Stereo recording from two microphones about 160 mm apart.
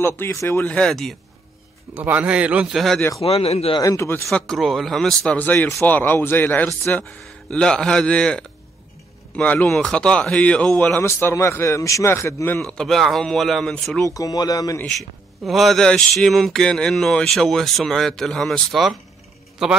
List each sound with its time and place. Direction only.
0.0 s speech: 15° left (ahead or behind)
2.0 s a man's voice: 10° right (ahead or behind)
3.2 s speech: 40° left (ahead or behind)
3.8 s speech: 20° left (ahead or behind)
4.3 s speech: centre (ahead or behind)
12.6 s speech: centre (ahead or behind)
14.1 s speech: 25° left (ahead or behind)
14.8 s speech: centre (ahead or behind)